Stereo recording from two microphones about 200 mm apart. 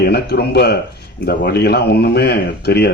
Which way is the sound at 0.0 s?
55° left (ahead or behind).